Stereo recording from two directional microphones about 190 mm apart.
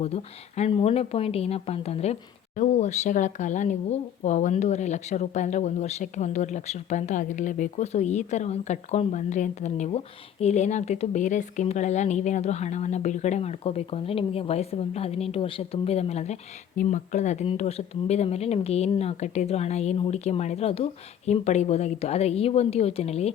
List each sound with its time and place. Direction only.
0.0 s speech: 35° left (ahead or behind)